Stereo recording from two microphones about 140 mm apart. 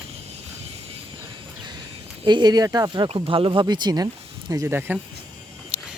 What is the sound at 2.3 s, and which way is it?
Speech, 30° right (ahead or behind).